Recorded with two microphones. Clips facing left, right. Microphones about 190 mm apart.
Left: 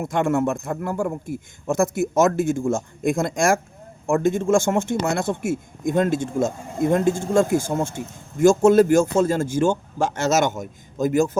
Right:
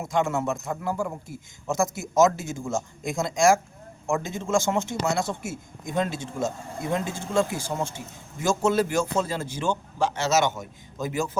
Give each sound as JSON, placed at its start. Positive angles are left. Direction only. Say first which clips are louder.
{"t": 0.0, "sound": "speech", "louder": "left 5 dB", "side_deg": 55}